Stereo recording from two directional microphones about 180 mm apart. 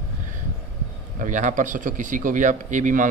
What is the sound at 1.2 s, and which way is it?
A man's voice, 45° right (ahead or behind).